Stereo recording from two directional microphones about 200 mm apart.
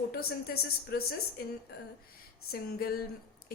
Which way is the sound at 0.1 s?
50° left (ahead or behind).